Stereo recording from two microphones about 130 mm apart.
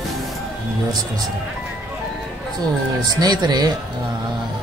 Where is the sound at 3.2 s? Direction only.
30° right (ahead or behind).